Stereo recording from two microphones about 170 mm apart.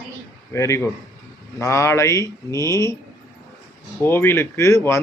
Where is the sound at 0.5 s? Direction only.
15° left (ahead or behind).